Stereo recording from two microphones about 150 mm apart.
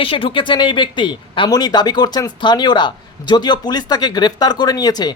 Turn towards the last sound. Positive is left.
turn(degrees=25)  # may be behind; listen again after turning